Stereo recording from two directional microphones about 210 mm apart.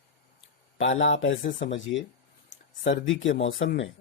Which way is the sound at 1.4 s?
35° left (ahead or behind).